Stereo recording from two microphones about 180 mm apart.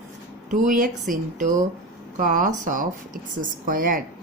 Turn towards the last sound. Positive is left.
turn(degrees=-50)  # may be behind; listen again after turning